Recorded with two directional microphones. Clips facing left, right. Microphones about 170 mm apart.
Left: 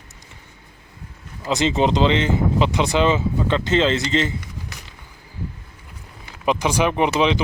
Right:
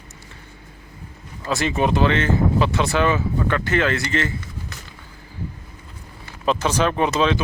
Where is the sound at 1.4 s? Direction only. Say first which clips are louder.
Left 2 dB; 20° left (ahead or behind).